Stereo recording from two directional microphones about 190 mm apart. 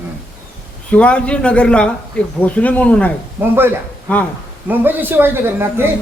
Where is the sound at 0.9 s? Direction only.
5° left (ahead or behind).